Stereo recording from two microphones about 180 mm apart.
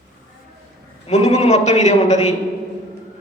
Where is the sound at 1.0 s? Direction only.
40° left (ahead or behind).